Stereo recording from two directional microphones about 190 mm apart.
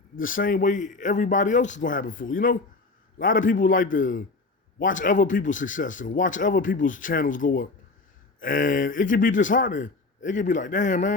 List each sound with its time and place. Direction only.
0.2 s speech: 45° left (ahead or behind)